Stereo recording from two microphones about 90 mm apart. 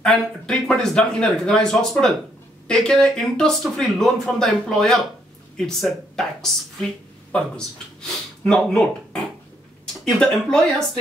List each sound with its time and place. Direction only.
0.0 s speech: 5° left (ahead or behind)
8.5 s speech: 5° left (ahead or behind)